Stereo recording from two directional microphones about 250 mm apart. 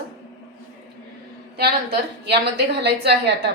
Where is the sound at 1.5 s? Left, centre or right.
Right.